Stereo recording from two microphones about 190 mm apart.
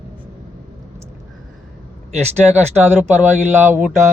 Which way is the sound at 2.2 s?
35° right (ahead or behind).